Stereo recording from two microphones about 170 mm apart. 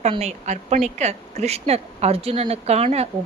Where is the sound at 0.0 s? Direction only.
40° right (ahead or behind).